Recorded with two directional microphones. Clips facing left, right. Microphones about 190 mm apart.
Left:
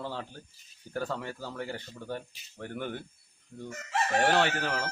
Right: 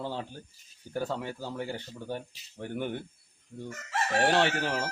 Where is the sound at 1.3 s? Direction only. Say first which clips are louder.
Right 2 dB; 20° right (ahead or behind).